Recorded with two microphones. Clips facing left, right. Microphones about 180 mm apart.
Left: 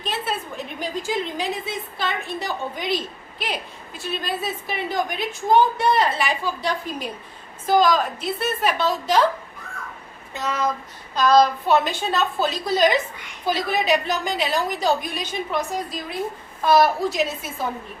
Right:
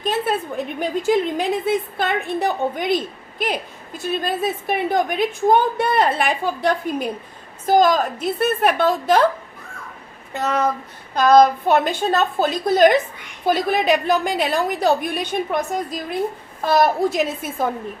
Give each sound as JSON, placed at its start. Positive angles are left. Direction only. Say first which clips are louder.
{"t": 0.0, "sound": "a woman's voice", "louder": "right 6 dB", "side_deg": -50}
{"t": 10.3, "sound": "a woman's voice", "louder": "right 4 dB", "side_deg": -60}